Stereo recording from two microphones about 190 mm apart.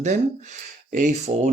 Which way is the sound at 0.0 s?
40° right (ahead or behind).